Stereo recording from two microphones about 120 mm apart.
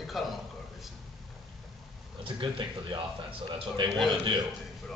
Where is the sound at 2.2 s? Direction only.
45° right (ahead or behind).